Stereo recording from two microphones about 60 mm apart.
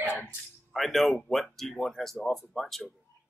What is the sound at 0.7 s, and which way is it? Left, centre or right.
Speech, centre.